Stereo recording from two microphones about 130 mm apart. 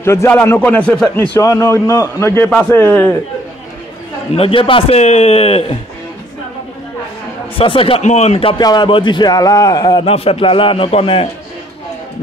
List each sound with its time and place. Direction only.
0.0 s speech: 20° left (ahead or behind)
1.4 s a man's voice: 25° left (ahead or behind)
4.4 s a man's voice: 45° left (ahead or behind)
7.5 s a man's voice: 45° left (ahead or behind)
8.0 s speech: 60° left (ahead or behind)
8.5 s a man's voice: 35° left (ahead or behind)
10.0 s a man's voice: 50° left (ahead or behind)